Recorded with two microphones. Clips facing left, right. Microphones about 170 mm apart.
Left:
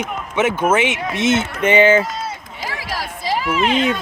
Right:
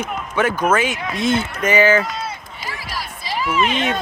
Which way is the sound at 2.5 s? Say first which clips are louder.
Left 3 dB; 90° left.